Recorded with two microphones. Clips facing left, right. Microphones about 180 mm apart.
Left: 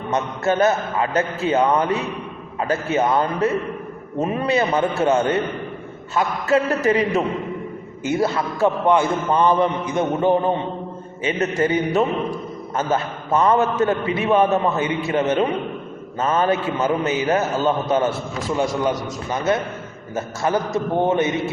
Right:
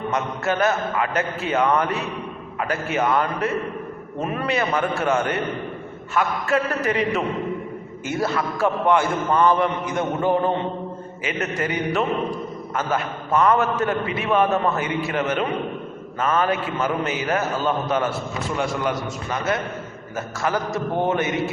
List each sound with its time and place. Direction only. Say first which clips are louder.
0.1 s a man's voice: left 5 dB; 25° left (ahead or behind)
8.0 s a man's voice: left 3 dB; 20° left (ahead or behind)